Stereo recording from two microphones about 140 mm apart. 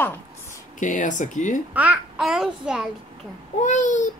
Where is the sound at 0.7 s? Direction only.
65° left (ahead or behind).